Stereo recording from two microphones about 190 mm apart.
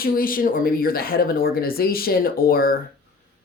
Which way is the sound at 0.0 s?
50° left (ahead or behind).